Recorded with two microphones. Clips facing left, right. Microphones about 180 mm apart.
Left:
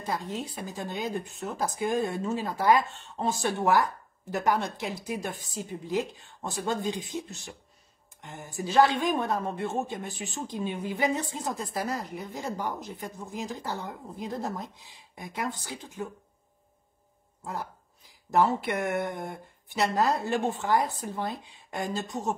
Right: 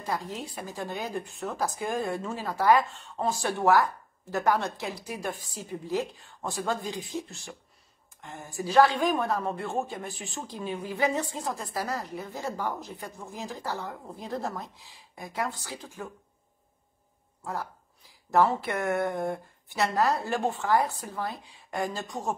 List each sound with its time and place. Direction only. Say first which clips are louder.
0.0 s speech: left 1 dB; 20° left (ahead or behind)
18.3 s speech: even; 15° left (ahead or behind)